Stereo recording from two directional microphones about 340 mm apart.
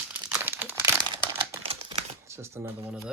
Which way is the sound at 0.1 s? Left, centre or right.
Centre.